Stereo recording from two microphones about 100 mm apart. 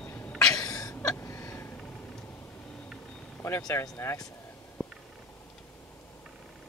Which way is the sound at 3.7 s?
30° left (ahead or behind).